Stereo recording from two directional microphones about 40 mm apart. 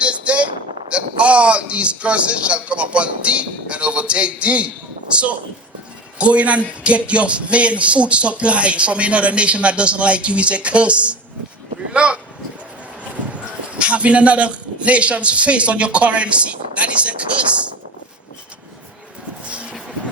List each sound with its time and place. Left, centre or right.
0.0 s a sound: right
0.9 s a man's voice: right
13.3 s speech: right